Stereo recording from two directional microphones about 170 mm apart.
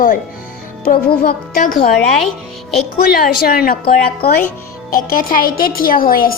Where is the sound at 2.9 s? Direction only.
60° left (ahead or behind).